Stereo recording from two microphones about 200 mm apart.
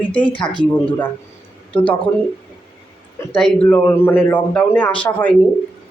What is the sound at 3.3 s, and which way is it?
A man's voice, 5° left (ahead or behind).